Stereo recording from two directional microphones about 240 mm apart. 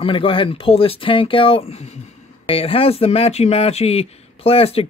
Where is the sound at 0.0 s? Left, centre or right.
Left.